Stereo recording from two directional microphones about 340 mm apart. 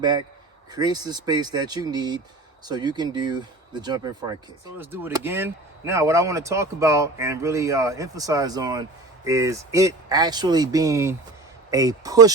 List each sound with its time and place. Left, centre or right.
0.0 s speech: centre